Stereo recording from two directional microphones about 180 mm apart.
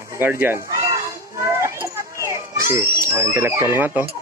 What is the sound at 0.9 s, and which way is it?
Children playing, 15° right (ahead or behind).